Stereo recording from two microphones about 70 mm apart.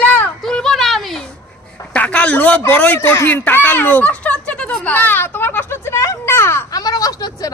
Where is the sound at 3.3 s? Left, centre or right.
Left.